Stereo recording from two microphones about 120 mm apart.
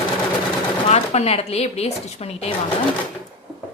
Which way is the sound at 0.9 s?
60° left (ahead or behind).